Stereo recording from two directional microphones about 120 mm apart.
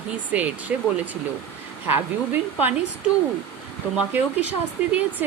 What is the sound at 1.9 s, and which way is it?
Speech, 15° right (ahead or behind).